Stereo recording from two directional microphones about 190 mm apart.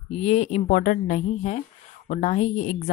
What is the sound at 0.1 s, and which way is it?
A woman's voice, 35° left (ahead or behind).